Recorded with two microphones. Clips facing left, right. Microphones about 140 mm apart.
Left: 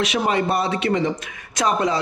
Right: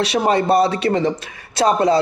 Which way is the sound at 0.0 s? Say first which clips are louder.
Right 4 dB; 35° right (ahead or behind).